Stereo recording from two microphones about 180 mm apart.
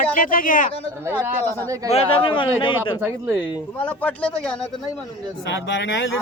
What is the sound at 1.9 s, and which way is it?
Speech, 35° left (ahead or behind).